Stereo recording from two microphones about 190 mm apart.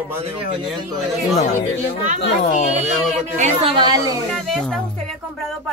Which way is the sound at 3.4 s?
30° right (ahead or behind).